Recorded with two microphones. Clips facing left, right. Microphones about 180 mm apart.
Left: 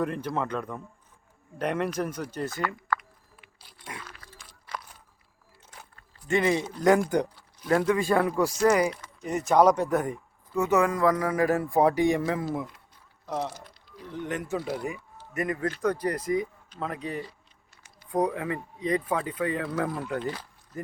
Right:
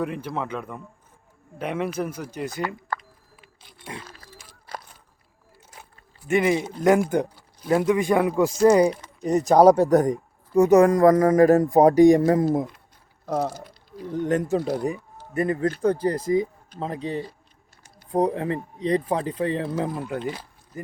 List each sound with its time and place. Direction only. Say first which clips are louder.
0.0 s a man's voice: right 1 dB; 5° right (ahead or behind); by 3.5 s 25° right (ahead or behind)
3.8 s scrape: right 4 dB; 30° right (ahead or behind)
4.7 s a sound: right 1 dB; 35° right (ahead or behind)
6.2 s a man's voice: right 3 dB; 15° right (ahead or behind)
9.2 s a man's voice: right 6 dB; 35° right (ahead or behind); by 20.9 s 10° right (ahead or behind)